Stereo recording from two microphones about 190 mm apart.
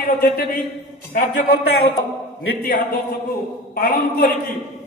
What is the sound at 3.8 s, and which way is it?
Speech, 50° left (ahead or behind).